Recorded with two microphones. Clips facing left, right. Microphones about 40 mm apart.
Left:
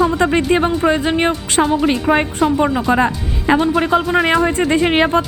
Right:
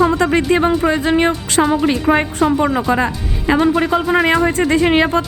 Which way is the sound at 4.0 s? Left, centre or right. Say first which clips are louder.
Right 1 dB; centre.